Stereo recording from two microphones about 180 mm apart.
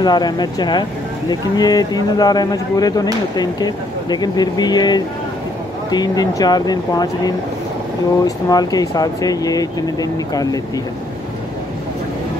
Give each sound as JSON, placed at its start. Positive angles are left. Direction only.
{"t": 0.0, "sound": "speech", "side_deg": 25}
{"t": 8.5, "sound": "speech", "side_deg": 20}